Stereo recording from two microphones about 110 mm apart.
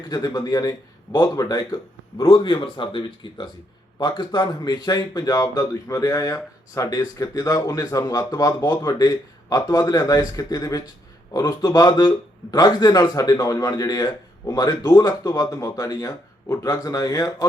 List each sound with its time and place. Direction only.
0.1 s speech: 35° left (ahead or behind)
2.2 s speech: 50° left (ahead or behind); by 17.3 s 35° left (ahead or behind)